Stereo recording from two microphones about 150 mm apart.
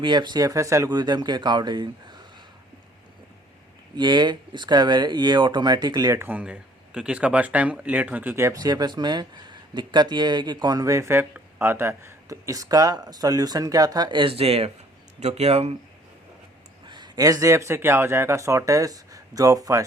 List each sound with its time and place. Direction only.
0.0 s speech: 30° right (ahead or behind)
3.9 s speech: 30° right (ahead or behind)
16.8 s speech: 30° right (ahead or behind)